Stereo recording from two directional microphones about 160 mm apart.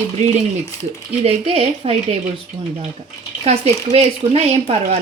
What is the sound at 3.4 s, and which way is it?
A woman's voice, 40° right (ahead or behind).